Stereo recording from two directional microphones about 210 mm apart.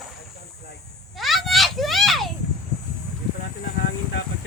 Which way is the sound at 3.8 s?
60° left (ahead or behind).